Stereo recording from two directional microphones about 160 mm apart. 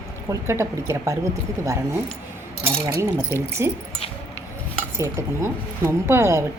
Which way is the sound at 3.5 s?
15° right (ahead or behind).